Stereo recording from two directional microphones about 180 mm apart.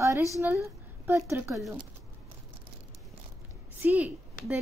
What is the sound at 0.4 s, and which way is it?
A woman's voice, 15° right (ahead or behind).